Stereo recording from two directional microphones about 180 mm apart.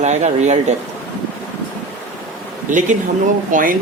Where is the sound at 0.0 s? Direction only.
40° right (ahead or behind).